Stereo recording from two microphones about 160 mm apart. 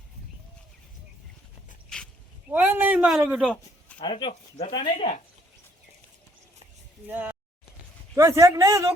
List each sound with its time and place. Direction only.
2.5 s speech: 10° right (ahead or behind)
4.0 s speech: 30° left (ahead or behind)
4.3 s speech: 45° left (ahead or behind)
4.7 s speech: 30° left (ahead or behind)
7.1 s speech: 10° right (ahead or behind)